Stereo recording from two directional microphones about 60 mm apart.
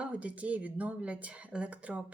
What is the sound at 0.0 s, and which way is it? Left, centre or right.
Speech, right.